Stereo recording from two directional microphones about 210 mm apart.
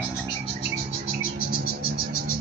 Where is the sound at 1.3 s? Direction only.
45° left (ahead or behind).